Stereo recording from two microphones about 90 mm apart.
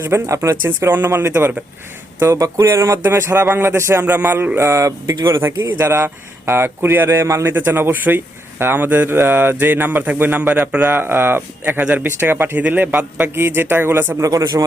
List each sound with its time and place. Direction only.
0.0 s speech: 30° right (ahead or behind)
14.3 s a man's voice: 45° right (ahead or behind)